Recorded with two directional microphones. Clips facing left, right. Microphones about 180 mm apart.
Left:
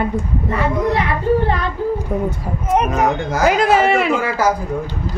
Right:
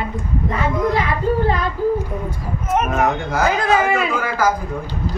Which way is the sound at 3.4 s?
80° left.